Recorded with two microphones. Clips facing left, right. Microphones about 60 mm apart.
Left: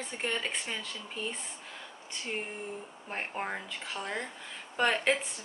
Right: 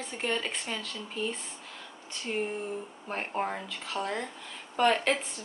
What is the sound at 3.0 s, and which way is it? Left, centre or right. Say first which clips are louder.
Speech: right 3 dB; centre.